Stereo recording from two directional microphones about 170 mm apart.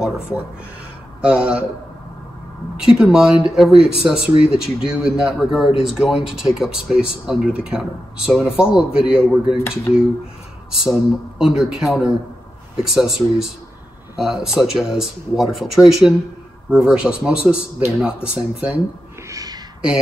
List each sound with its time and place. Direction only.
1.2 s speech: 5° right (ahead or behind)
2.8 s speech: 5° right (ahead or behind)
9.6 s speech: 15° left (ahead or behind)
10.7 s speech: 5° right (ahead or behind)
19.2 s a sound: 20° right (ahead or behind)